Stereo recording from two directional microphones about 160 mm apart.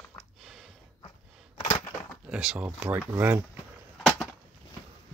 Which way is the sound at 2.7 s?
10° right (ahead or behind).